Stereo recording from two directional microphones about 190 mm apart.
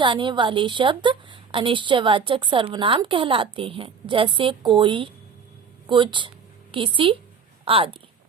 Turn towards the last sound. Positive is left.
turn(degrees=-30)  # may be behind; listen again after turning